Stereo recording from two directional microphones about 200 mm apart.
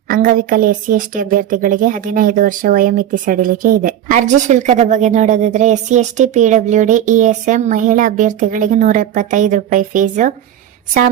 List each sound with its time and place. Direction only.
0.1 s speech: 45° right (ahead or behind)